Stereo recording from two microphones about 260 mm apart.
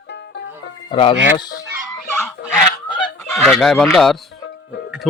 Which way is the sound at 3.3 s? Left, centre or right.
Centre.